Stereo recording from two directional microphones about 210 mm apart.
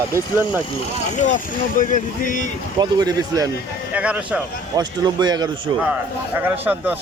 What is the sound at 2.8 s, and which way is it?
Speech, 20° right (ahead or behind).